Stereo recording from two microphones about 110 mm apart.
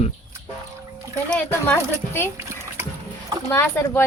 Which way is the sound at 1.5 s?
20° left (ahead or behind).